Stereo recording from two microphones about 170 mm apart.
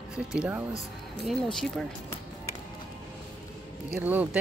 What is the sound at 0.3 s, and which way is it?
Speech, 10° right (ahead or behind).